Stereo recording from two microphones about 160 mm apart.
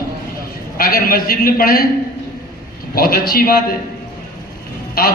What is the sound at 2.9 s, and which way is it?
Speech, 70° left (ahead or behind).